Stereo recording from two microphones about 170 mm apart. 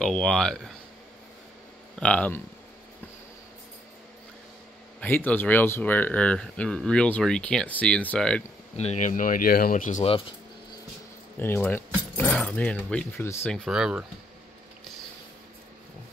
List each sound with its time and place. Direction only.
0.0 s speech: 5° left (ahead or behind)
2.0 s speech: 5° left (ahead or behind)
5.0 s speech: 10° left (ahead or behind)
8.7 s speech: 40° left (ahead or behind)
11.3 s speech: 10° left (ahead or behind)
13.7 s speech: 5° right (ahead or behind)